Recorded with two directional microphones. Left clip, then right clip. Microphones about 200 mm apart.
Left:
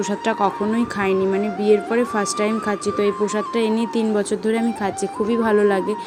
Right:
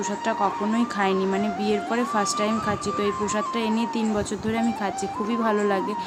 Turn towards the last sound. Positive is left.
turn(degrees=15)  # may be behind; listen again after turning